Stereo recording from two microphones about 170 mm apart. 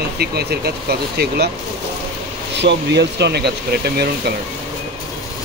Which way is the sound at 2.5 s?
90° right.